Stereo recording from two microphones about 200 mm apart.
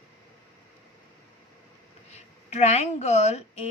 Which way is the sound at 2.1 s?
35° left (ahead or behind).